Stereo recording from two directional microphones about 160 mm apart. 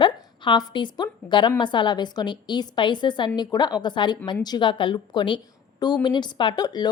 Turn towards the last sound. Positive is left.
turn(degrees=25)  # may be behind; listen again after turning